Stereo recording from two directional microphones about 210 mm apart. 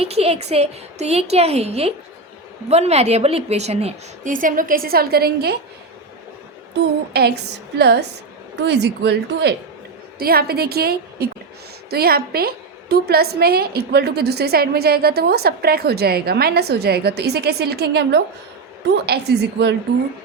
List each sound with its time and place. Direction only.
0.0 s a woman's voice: 30° right (ahead or behind); by 5.5 s 50° right (ahead or behind)
6.8 s a woman's voice: 55° right (ahead or behind)